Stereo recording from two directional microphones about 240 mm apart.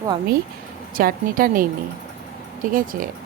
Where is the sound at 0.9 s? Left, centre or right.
Right.